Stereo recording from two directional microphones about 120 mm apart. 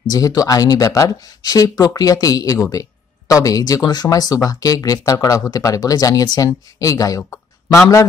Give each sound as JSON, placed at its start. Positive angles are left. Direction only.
{"t": 0.1, "sound": "speech", "side_deg": 30}